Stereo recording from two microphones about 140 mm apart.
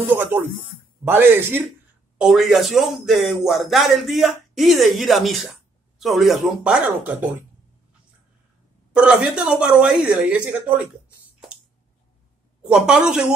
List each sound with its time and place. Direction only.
0.0 s a woman's voice: 15° right (ahead or behind)
2.1 s a man's voice: 5° right (ahead or behind)
8.9 s a woman's voice: 5° right (ahead or behind)
12.6 s a man's voice: 5° right (ahead or behind)